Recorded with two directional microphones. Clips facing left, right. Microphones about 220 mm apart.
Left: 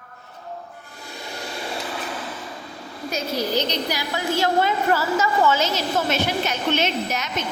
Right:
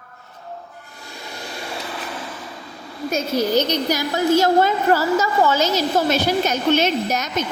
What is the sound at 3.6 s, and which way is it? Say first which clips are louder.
A woman's voice: right 5 dB; 45° right (ahead or behind).